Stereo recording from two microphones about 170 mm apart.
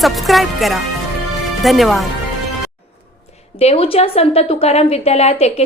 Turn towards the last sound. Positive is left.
turn(degrees=40)  # may be behind; listen again after turning